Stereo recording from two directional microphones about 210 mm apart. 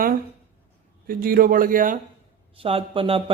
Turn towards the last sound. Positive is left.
turn(degrees=-25)  # may be behind; listen again after turning